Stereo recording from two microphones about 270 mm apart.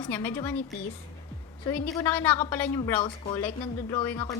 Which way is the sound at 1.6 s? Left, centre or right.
Centre.